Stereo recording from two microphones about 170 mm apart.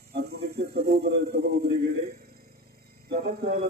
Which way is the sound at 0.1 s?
65° right (ahead or behind).